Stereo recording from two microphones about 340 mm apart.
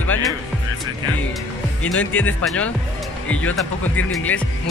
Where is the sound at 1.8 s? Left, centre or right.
Centre.